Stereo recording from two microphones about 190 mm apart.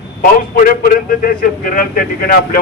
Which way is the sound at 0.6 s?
50° left (ahead or behind).